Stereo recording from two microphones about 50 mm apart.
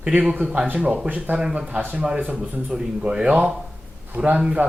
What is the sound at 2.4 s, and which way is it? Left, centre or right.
Speech, right.